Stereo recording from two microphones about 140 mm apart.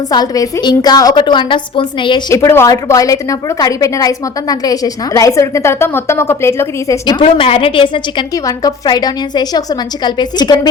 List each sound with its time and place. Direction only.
0.1 s a woman's voice: 30° left (ahead or behind)
2.3 s a woman's voice: 20° left (ahead or behind)
7.2 s a woman's voice: 40° left (ahead or behind)
8.4 s a woman's voice: 30° left (ahead or behind)